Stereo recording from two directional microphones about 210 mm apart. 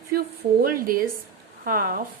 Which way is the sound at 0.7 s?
45° right (ahead or behind).